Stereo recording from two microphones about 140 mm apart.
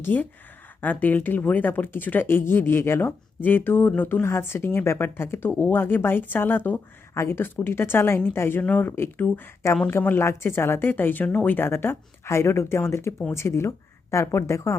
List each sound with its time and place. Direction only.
0.0 s speech: 15° left (ahead or behind)